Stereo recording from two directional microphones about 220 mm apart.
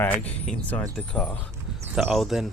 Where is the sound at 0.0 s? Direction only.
5° left (ahead or behind).